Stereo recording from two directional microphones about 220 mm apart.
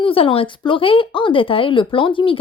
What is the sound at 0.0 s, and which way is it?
Speech, 25° left (ahead or behind).